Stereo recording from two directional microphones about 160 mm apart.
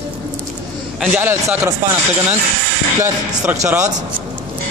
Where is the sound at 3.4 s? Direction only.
10° right (ahead or behind).